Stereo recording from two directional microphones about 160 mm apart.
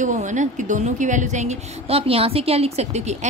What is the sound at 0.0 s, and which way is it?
A woman's voice, 50° right (ahead or behind).